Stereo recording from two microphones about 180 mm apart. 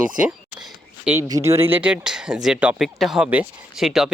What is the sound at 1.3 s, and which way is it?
Speech, 15° right (ahead or behind).